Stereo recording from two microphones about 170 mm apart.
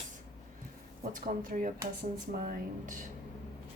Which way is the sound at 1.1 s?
55° right (ahead or behind).